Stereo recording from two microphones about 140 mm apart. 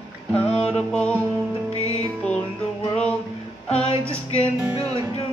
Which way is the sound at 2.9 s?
5° left (ahead or behind).